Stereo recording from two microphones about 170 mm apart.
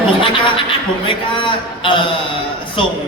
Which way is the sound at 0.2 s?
30° left (ahead or behind).